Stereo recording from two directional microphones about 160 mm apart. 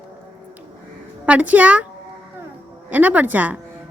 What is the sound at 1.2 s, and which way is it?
Speech, 10° right (ahead or behind).